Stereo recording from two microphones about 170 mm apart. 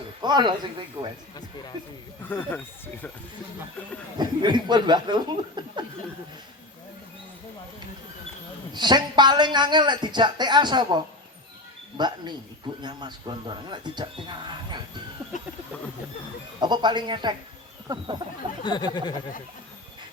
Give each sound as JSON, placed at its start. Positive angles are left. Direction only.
{"t": 0.2, "sound": "a man's voice", "side_deg": -25}
{"t": 2.3, "sound": "speech", "side_deg": 10}
{"t": 4.2, "sound": "a man's voice", "side_deg": -25}
{"t": 8.7, "sound": "a man's voice", "side_deg": -25}
{"t": 15.3, "sound": "speech", "side_deg": 45}
{"t": 16.6, "sound": "a man's voice", "side_deg": -25}
{"t": 18.6, "sound": "speech", "side_deg": 25}